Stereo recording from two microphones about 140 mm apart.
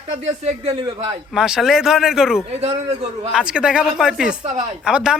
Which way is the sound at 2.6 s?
45° right (ahead or behind).